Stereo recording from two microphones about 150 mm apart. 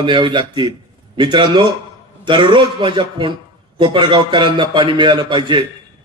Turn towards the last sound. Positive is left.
turn(degrees=-30)  # may be behind; listen again after turning